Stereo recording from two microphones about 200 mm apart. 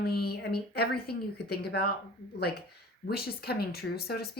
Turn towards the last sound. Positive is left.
turn(degrees=50)  # may be behind; listen again after turning